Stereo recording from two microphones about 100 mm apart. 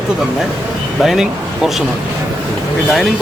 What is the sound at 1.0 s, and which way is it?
Speech, 5° right (ahead or behind).